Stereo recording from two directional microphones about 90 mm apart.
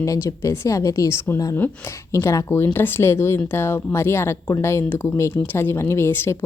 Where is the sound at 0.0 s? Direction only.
40° left (ahead or behind).